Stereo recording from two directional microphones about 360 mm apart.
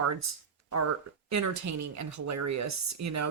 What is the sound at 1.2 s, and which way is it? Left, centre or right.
Speech, right.